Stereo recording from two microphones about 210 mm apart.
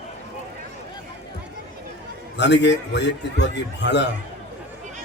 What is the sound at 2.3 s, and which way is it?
Speech, 55° left (ahead or behind).